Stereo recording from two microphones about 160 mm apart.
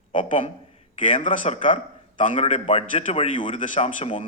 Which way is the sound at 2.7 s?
35° left (ahead or behind).